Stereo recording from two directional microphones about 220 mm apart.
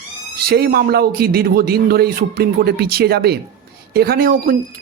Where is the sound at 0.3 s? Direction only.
45° right (ahead or behind).